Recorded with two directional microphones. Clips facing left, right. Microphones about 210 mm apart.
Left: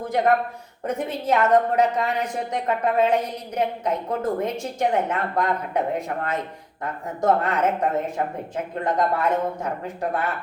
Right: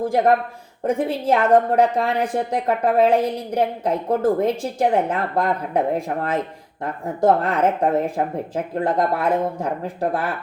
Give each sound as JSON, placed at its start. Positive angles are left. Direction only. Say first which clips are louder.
{"t": 0.0, "sound": "a woman's voice", "louder": "right 3 dB", "side_deg": -30}
{"t": 1.5, "sound": "a woman's voice", "louder": "right 4 dB", "side_deg": -30}